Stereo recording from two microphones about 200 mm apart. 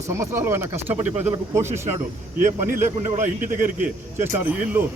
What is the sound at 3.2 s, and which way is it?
Speech, 45° right (ahead or behind).